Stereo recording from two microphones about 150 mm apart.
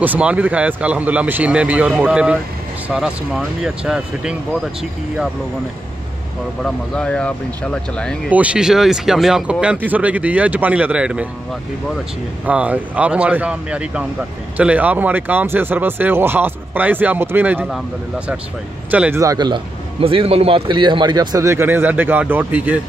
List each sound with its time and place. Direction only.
0.0 s speech: 10° right (ahead or behind)
6.6 s speech: 5° left (ahead or behind)
8.3 s speech: 10° right (ahead or behind)
12.4 s speech: 10° right (ahead or behind)
18.9 s speech: 10° right (ahead or behind)
19.2 s a man's voice: 25° right (ahead or behind); by 22.8 s 10° right (ahead or behind)